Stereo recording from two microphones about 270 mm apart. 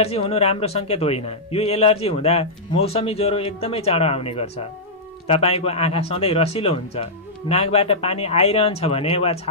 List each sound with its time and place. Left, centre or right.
0.0 s speech: left